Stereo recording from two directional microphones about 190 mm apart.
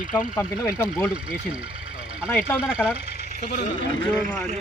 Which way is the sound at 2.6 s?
5° right (ahead or behind).